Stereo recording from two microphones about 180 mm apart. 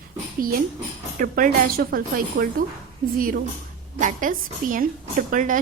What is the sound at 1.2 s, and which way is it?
A woman's voice, 55° right (ahead or behind).